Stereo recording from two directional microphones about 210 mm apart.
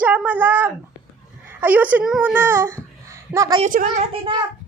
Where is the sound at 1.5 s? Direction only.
10° right (ahead or behind).